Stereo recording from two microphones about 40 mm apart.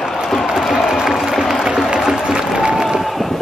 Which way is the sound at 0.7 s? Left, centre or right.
Centre.